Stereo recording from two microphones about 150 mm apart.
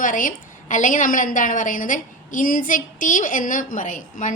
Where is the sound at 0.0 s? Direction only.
65° left (ahead or behind).